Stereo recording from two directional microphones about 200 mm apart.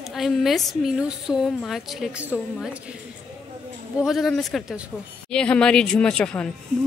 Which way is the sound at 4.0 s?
Centre (ahead or behind).